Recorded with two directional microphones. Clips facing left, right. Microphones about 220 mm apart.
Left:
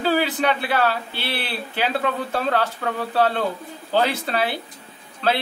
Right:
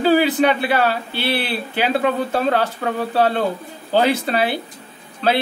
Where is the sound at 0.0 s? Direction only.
15° right (ahead or behind).